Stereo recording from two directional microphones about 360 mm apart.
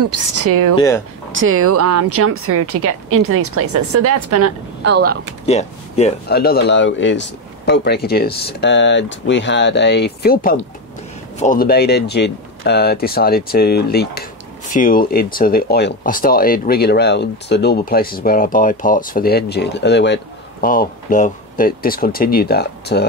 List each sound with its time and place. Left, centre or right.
0.4 s a woman's voice: right
0.7 s speech: centre
1.3 s a woman's voice: right
4.9 s speech: right
5.5 s speech: centre